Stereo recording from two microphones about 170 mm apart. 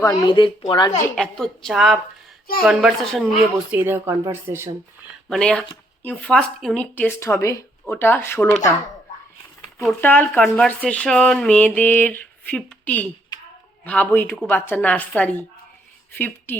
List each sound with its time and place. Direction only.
0.0 s speech: 25° left (ahead or behind)
1.1 s a woman's voice: 5° left (ahead or behind)
3.7 s speech: 10° right (ahead or behind)
5.3 s speech: 5° left (ahead or behind)
9.7 s speech: 10° left (ahead or behind)